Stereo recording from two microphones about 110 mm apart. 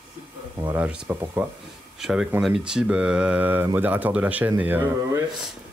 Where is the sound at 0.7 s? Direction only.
10° right (ahead or behind).